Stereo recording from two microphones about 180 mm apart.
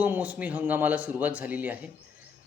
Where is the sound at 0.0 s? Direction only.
10° right (ahead or behind).